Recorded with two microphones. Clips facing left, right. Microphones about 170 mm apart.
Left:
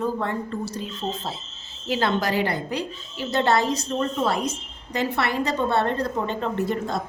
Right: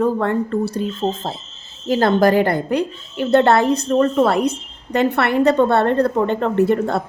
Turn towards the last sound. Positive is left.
turn(degrees=-65)  # may be behind; listen again after turning